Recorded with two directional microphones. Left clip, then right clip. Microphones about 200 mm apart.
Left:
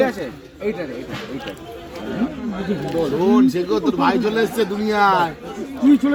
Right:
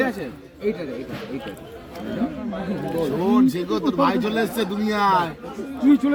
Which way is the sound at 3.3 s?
55° right (ahead or behind).